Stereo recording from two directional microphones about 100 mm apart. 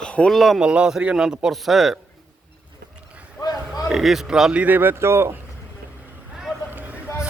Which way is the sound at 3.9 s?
5° right (ahead or behind).